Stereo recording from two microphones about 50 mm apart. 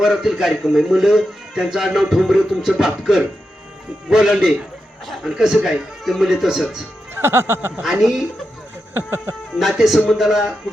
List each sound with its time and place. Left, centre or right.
0.0 s a man's voice: centre
7.2 s music: right
7.8 s a man's voice: centre
8.9 s a sound: right
9.6 s speech: centre